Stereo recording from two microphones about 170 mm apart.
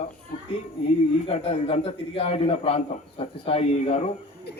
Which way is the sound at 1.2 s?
35° left (ahead or behind).